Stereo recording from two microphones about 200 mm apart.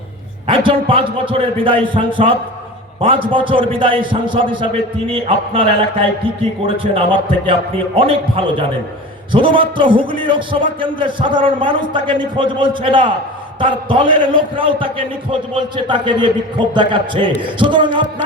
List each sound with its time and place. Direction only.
0.4 s a man's voice: 25° right (ahead or behind)